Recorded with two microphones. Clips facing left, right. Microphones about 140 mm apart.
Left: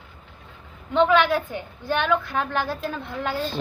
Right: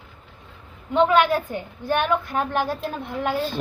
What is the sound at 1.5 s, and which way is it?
Speech, 45° right (ahead or behind).